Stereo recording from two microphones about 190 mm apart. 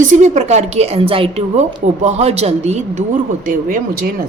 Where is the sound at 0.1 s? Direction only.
40° right (ahead or behind).